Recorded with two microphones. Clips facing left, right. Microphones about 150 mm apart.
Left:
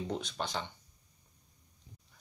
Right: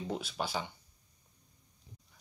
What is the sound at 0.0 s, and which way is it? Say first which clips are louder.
Speech: even; 5° right (ahead or behind).